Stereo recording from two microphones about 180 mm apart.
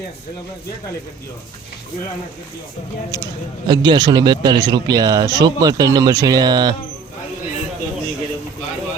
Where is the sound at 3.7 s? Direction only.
25° right (ahead or behind).